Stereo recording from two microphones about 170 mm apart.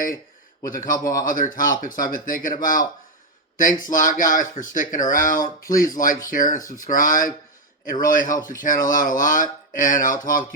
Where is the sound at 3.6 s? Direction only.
55° left (ahead or behind).